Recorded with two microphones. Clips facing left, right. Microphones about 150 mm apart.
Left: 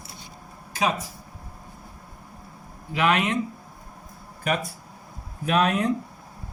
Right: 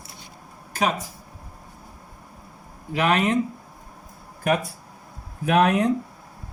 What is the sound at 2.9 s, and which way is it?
Speech, 40° right (ahead or behind).